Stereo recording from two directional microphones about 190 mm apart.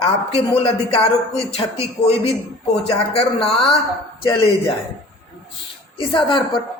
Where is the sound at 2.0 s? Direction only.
30° left (ahead or behind).